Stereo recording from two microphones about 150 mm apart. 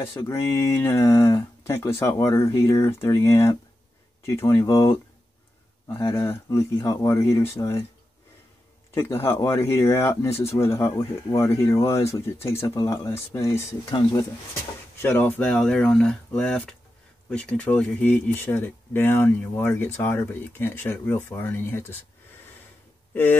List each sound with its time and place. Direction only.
0.2 s speech: 20° left (ahead or behind)
8.9 s speech: 15° left (ahead or behind)
15.0 s speech: 15° left (ahead or behind)